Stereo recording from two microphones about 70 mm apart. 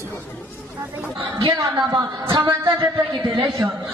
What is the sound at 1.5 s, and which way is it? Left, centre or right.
Speech, right.